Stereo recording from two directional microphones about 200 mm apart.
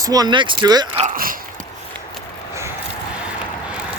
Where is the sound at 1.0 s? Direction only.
45° right (ahead or behind).